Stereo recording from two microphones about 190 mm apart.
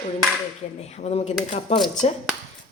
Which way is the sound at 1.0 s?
35° left (ahead or behind).